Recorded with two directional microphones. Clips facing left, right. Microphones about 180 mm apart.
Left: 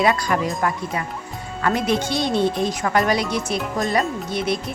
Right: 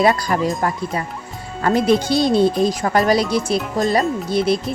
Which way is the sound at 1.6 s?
35° right (ahead or behind).